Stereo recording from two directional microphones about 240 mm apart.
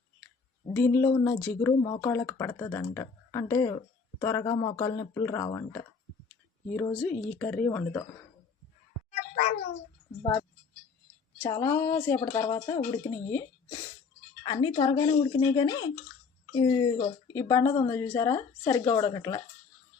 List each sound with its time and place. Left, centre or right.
0.7 s speech: centre
11.3 s speech: centre